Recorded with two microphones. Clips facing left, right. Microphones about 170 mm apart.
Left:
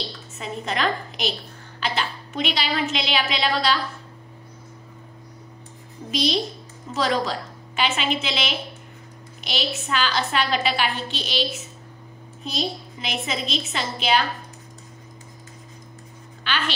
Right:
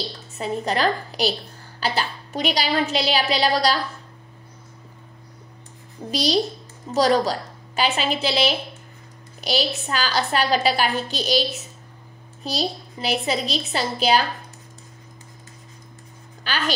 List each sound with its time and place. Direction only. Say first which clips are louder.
0.3 s a woman's voice: right 5 dB; 35° right (ahead or behind)
6.1 s a woman's voice: right 2 dB; 35° right (ahead or behind)
16.4 s speech: right 1 dB; 40° right (ahead or behind)